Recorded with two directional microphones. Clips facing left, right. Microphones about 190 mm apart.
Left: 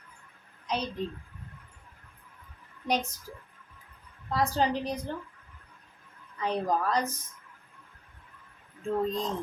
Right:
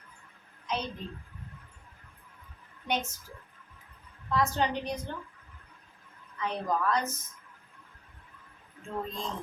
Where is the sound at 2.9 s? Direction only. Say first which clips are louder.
Left 3 dB; 35° left (ahead or behind).